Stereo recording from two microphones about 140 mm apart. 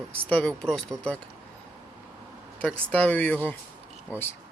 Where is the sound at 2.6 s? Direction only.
10° left (ahead or behind).